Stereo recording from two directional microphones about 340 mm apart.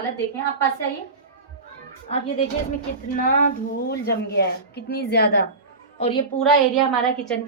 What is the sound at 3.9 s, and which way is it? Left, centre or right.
A woman's voice, left.